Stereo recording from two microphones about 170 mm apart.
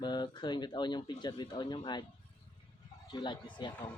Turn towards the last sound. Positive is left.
turn(degrees=25)  # may be behind; listen again after turning